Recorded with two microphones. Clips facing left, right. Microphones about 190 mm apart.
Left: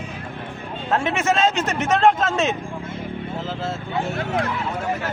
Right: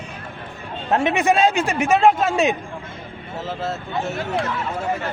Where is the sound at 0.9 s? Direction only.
15° right (ahead or behind).